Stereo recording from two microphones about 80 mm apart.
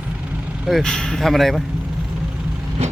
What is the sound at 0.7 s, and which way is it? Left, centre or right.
Speech, centre.